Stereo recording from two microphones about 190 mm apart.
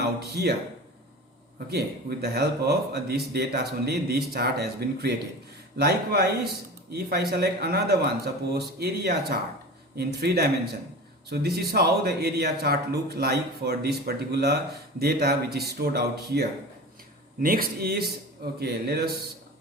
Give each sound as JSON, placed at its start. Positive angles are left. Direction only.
{"t": 0.0, "sound": "speech", "side_deg": -55}
{"t": 1.7, "sound": "speech", "side_deg": -55}